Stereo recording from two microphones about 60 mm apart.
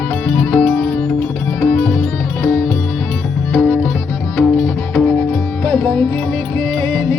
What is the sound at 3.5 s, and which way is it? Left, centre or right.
Music, left.